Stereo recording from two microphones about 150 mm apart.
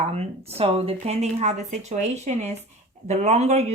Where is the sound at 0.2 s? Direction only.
45° right (ahead or behind).